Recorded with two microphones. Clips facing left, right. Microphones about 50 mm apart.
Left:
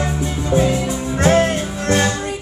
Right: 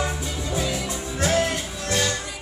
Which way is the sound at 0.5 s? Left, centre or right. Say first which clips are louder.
Left 10 dB; left.